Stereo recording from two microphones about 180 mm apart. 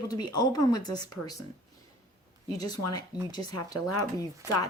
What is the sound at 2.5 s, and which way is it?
Speech, 20° left (ahead or behind).